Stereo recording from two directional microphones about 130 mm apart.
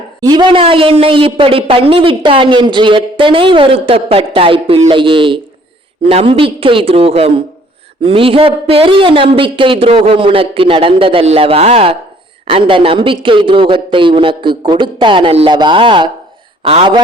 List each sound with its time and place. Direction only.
0.2 s a woman's voice: 35° right (ahead or behind)